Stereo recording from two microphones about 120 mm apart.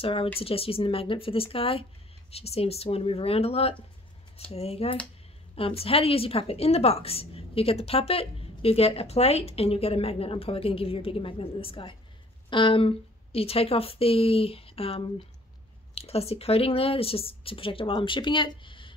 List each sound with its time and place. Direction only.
0.0 s a woman's voice: 50° left (ahead or behind)